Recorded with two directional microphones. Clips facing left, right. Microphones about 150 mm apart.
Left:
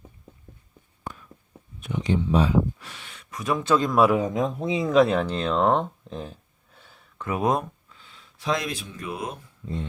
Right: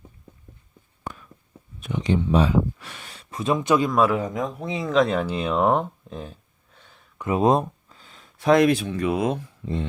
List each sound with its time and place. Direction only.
1.1 s a sound: 85° right
1.8 s speech: 85° right
3.0 s speech: 35° right (ahead or behind); by 3.9 s 15° right (ahead or behind)
3.9 s a man's voice: 10° left (ahead or behind)
4.4 s speech: 25° left (ahead or behind)
4.7 s a man's voice: 10° left (ahead or behind)
5.0 s a sound: 5° right (ahead or behind)
7.2 s speech: 25° right (ahead or behind); by 9.8 s 90° right